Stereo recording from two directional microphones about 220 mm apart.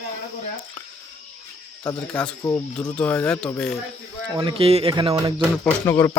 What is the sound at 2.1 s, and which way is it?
Speech, 5° left (ahead or behind).